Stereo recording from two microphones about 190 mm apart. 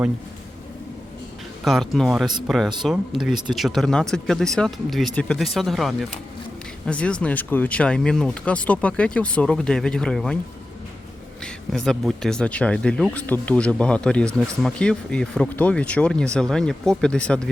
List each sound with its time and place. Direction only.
1.6 s speech: centre (ahead or behind)
11.4 s speech: centre (ahead or behind)